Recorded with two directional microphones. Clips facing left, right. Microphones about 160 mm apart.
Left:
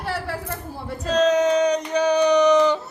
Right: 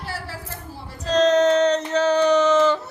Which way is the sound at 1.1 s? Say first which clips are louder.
Right 1 dB; 10° left (ahead or behind).